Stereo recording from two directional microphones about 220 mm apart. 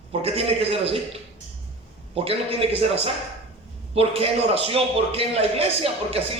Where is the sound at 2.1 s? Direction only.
25° right (ahead or behind).